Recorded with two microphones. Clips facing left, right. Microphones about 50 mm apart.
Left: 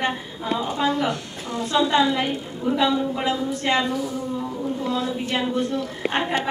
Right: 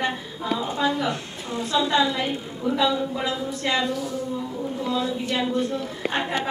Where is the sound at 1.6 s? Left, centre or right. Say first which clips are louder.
Left 2 dB; left.